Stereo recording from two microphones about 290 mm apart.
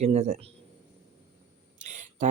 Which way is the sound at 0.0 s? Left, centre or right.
Right.